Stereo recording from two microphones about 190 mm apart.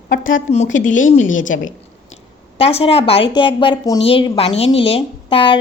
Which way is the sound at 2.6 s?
30° left (ahead or behind).